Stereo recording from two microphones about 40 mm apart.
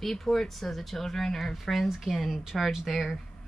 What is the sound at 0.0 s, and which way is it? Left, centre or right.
Speech, centre.